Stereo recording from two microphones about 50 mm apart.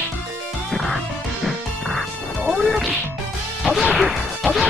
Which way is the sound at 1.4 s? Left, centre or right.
Centre.